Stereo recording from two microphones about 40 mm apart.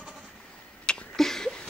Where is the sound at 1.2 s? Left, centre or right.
Centre.